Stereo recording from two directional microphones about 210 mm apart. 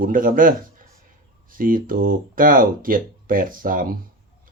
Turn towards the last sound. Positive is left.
turn(degrees=-40)  # may be behind; listen again after turning